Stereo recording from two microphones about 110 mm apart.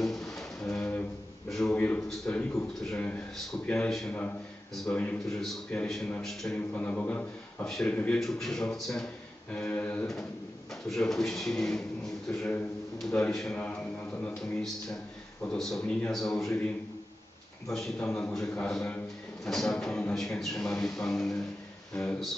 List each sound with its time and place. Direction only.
0.0 s a sound: 5° left (ahead or behind)
2.9 s a man's voice: 10° left (ahead or behind)
9.6 s a man's voice: 10° left (ahead or behind)
15.5 s a man's voice: 5° left (ahead or behind)
17.7 s a man's voice: 5° left (ahead or behind)